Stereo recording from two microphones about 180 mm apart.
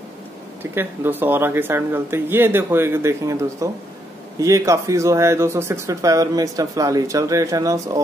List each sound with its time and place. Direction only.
0.6 s speech: 10° right (ahead or behind)